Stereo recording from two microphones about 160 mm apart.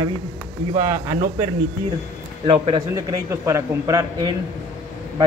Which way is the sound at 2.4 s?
30° right (ahead or behind).